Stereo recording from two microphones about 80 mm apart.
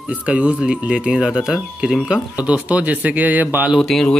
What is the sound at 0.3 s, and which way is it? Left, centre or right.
Speech, centre.